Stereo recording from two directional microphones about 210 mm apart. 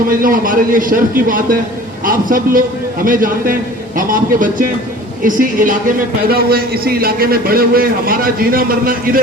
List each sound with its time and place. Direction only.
0.1 s a man's voice: 40° right (ahead or behind)